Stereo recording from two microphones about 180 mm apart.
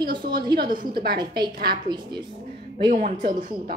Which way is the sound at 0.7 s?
50° right (ahead or behind).